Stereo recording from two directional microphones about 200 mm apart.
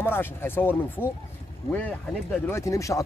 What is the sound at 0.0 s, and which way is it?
Speech, 10° left (ahead or behind).